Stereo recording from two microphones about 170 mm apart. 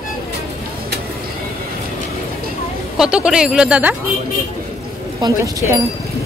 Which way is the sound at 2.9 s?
5° right (ahead or behind).